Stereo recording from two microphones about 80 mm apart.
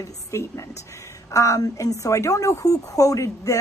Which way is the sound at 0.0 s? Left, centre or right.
Left.